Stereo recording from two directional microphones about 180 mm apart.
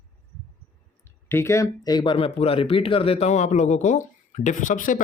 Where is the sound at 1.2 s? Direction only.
15° left (ahead or behind).